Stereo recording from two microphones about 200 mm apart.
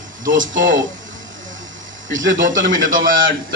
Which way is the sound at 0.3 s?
40° right (ahead or behind).